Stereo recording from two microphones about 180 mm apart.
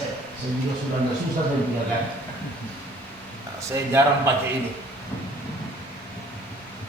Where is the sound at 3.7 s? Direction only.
15° right (ahead or behind).